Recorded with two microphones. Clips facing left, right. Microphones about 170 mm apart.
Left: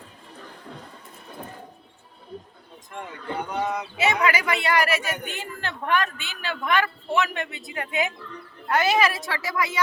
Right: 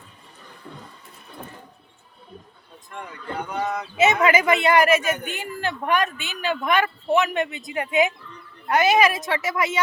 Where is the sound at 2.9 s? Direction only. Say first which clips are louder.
Even; 20° left (ahead or behind).